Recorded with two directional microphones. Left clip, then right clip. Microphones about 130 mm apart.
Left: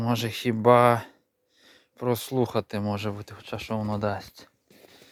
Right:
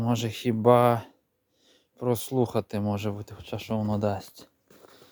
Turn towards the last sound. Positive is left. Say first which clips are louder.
# even
turn(degrees=-25)  # may be behind; listen again after turning